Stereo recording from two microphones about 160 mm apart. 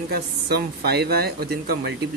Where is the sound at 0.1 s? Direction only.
80° right.